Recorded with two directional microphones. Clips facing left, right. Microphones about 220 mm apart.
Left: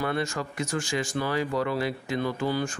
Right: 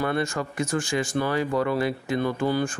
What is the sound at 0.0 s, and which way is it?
Speech, 50° right (ahead or behind).